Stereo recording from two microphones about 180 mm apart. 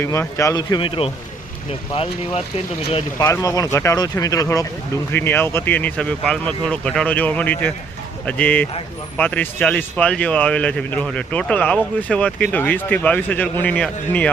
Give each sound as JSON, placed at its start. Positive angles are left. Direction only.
{"t": 0.0, "sound": "speech", "side_deg": 15}
{"t": 3.2, "sound": "speech", "side_deg": 15}